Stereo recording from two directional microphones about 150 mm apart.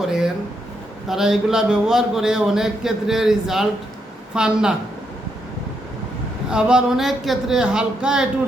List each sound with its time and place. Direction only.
0.0 s a man's voice: 5° right (ahead or behind)
6.5 s a man's voice: 5° right (ahead or behind)